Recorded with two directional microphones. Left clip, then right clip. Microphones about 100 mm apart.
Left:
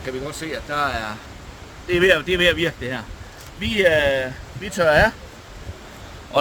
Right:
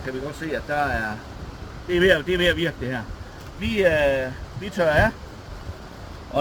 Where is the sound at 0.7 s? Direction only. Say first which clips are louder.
Left 1 dB; 55° left (ahead or behind); by 5.1 s 75° left (ahead or behind).